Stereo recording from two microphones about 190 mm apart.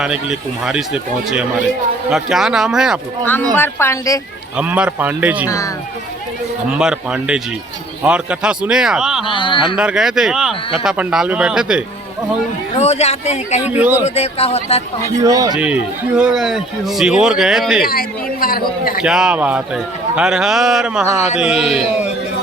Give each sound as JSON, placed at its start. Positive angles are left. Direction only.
{"t": 0.0, "sound": "a man's voice", "side_deg": -5}
{"t": 3.5, "sound": "speech", "side_deg": 10}
{"t": 4.5, "sound": "speech", "side_deg": -5}
{"t": 5.5, "sound": "speech", "side_deg": 15}
{"t": 6.7, "sound": "a man's voice", "side_deg": -5}
{"t": 9.2, "sound": "speech", "side_deg": 25}
{"t": 9.7, "sound": "a man's voice", "side_deg": -5}
{"t": 12.7, "sound": "speech", "side_deg": 35}
{"t": 13.7, "sound": "speech", "side_deg": -10}
{"t": 14.0, "sound": "speech", "side_deg": 35}
{"t": 15.2, "sound": "speech", "side_deg": -20}
{"t": 15.5, "sound": "a man's voice", "side_deg": -5}
{"t": 17.8, "sound": "a man's voice", "side_deg": 50}
{"t": 19.0, "sound": "a man's voice", "side_deg": -5}